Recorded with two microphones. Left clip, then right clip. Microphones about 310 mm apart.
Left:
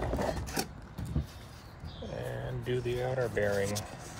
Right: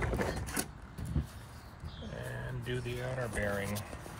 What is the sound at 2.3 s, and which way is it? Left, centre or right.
Speech, centre.